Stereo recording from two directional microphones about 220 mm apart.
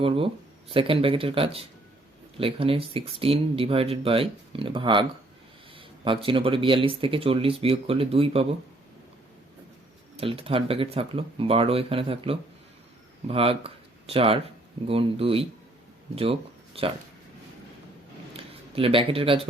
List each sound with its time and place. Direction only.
0.0 s speech: 25° right (ahead or behind)
10.2 s speech: 25° right (ahead or behind)
18.3 s speech: 25° right (ahead or behind)